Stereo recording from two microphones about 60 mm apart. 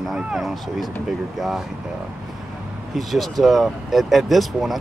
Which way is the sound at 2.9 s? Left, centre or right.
Centre.